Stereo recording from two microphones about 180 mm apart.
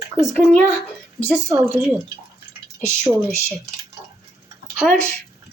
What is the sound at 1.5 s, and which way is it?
Speech, 15° right (ahead or behind).